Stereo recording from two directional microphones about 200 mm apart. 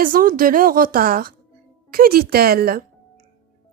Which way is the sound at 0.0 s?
45° right (ahead or behind).